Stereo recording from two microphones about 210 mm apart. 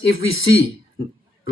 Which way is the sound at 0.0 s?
70° left (ahead or behind).